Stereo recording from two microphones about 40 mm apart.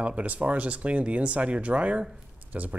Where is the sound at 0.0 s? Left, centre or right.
Right.